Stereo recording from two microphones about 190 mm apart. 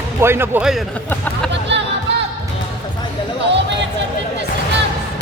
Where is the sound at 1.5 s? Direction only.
65° right (ahead or behind).